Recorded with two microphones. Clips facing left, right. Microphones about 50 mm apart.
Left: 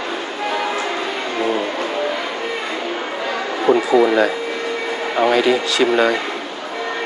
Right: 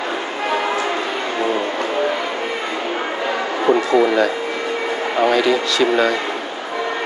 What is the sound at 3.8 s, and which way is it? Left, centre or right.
Speech, centre.